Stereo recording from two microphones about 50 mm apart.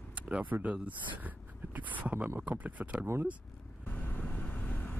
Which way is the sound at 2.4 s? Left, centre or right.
Right.